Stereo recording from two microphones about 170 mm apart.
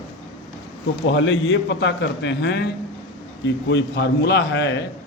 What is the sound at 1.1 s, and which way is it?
A man's voice, 90° left.